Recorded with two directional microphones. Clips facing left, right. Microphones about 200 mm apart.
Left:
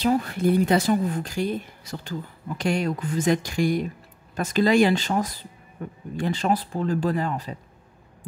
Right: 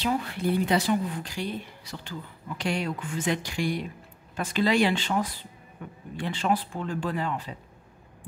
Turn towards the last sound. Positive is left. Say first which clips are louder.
# left 5 dB
turn(degrees=40)  # may be behind; listen again after turning